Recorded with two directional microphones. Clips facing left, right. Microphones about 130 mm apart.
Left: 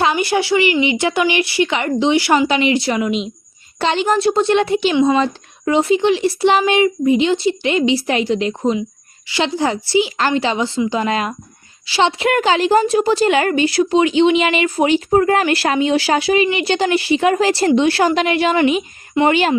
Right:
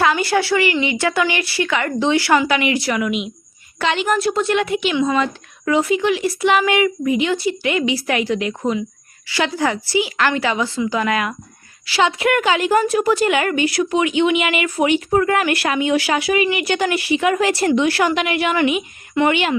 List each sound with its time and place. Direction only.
0.0 s a woman's voice: 20° left (ahead or behind); by 19.5 s 35° left (ahead or behind)